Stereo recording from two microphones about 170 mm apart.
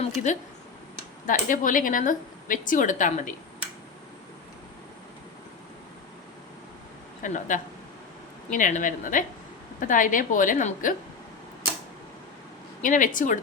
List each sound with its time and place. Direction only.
0.2 s speech: 45° left (ahead or behind)
7.2 s speech: 50° left (ahead or behind)
12.8 s speech: 50° left (ahead or behind)